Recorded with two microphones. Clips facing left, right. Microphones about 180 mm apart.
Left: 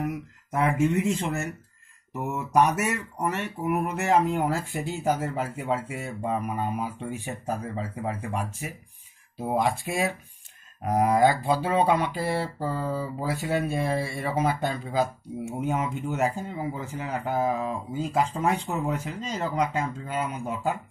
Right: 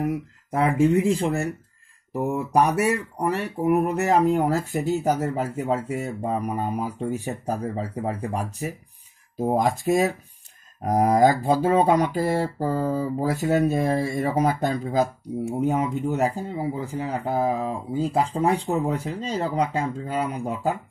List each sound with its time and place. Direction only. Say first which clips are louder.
0.0 s speech: right 5 dB; 30° right (ahead or behind)